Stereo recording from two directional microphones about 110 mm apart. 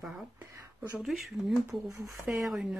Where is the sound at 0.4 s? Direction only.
30° right (ahead or behind).